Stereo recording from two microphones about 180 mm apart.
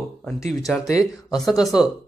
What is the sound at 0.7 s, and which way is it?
A man's voice, 5° left (ahead or behind).